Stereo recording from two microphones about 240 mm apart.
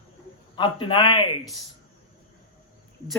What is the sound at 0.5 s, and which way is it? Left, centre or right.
Speech, centre.